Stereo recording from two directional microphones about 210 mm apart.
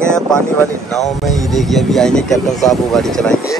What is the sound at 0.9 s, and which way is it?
Speech, centre (ahead or behind).